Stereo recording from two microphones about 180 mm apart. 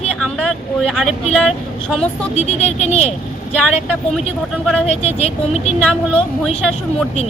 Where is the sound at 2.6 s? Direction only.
35° left (ahead or behind).